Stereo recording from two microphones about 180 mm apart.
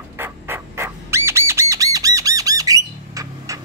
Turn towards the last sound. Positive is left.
turn(degrees=-20)  # may be behind; listen again after turning